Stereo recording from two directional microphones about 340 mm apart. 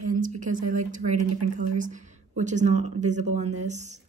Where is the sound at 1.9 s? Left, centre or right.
Right.